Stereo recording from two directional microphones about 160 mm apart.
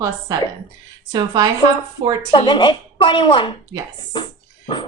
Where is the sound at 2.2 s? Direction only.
30° left (ahead or behind).